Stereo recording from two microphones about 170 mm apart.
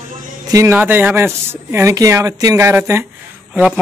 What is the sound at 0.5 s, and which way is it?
Speech, 15° right (ahead or behind).